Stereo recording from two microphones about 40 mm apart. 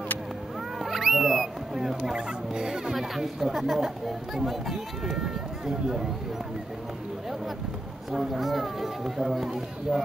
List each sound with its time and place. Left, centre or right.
0.7 s cat: centre
2.0 s speech: right
2.9 s speech: centre
8.2 s speech: centre